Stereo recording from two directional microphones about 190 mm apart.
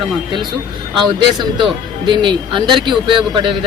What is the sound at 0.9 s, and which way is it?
Speech, 25° right (ahead or behind).